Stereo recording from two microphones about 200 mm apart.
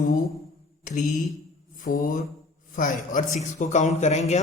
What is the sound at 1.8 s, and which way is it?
Mantra, 45° left (ahead or behind).